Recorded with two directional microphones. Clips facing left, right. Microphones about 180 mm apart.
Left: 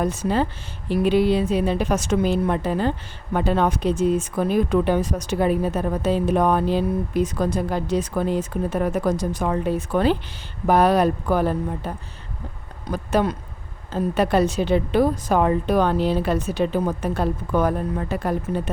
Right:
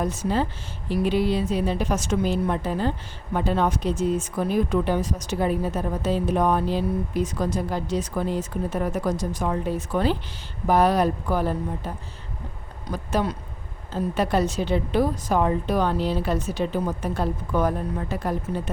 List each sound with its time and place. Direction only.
0.0 s a woman's voice: 65° left (ahead or behind)
12.9 s a woman's voice: 60° left (ahead or behind)